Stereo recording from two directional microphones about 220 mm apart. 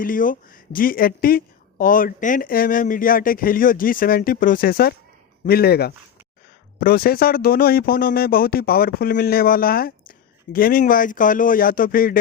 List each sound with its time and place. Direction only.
0.0 s speech: 40° left (ahead or behind)